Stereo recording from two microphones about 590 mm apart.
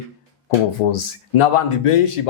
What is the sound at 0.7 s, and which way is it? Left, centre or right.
Speech, left.